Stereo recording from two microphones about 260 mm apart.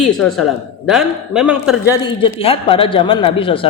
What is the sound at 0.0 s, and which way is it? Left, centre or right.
A man's voice, centre.